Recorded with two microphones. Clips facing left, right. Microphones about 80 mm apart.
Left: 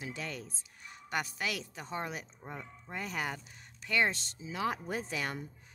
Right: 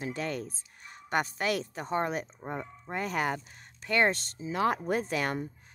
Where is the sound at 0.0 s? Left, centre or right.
Right.